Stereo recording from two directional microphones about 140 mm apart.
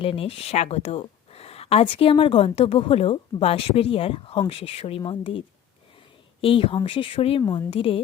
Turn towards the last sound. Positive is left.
turn(degrees=40)  # may be behind; listen again after turning